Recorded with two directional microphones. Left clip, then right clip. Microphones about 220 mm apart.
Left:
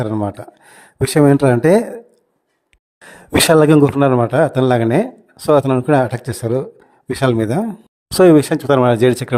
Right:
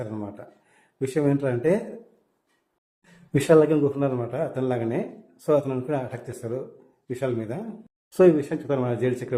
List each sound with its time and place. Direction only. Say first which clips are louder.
0.0 s speech: left 13 dB; 45° left (ahead or behind)
3.5 s speech: left 6 dB; 50° left (ahead or behind)